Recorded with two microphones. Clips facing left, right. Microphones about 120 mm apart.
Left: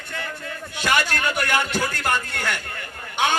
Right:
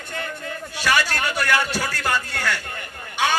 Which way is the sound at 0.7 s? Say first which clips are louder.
Even; 20° left (ahead or behind).